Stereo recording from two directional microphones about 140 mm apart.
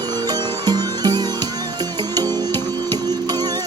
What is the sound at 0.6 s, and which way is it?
Music, 30° right (ahead or behind).